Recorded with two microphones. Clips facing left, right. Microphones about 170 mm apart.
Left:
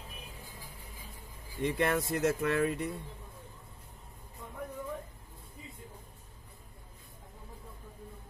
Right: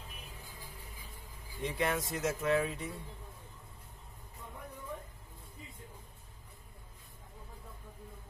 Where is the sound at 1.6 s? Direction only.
60° left (ahead or behind).